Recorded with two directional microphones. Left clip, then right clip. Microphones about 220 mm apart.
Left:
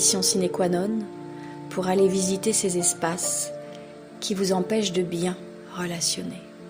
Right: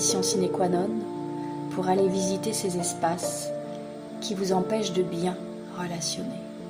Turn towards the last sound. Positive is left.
turn(degrees=35)  # may be behind; listen again after turning